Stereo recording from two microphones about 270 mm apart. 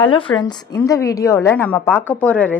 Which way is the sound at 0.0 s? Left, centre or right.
Centre.